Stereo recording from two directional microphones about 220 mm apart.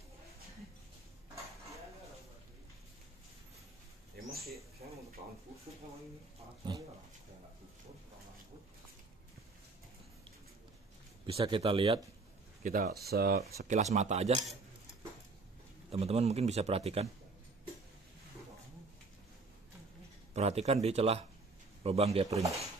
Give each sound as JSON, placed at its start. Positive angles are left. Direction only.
{"t": 6.6, "sound": "dog", "side_deg": -20}
{"t": 11.2, "sound": "a man's voice", "side_deg": -25}
{"t": 12.6, "sound": "speech", "side_deg": -40}
{"t": 13.6, "sound": "speech", "side_deg": -35}
{"t": 15.9, "sound": "a man's voice", "side_deg": -30}
{"t": 20.3, "sound": "a man's voice", "side_deg": -30}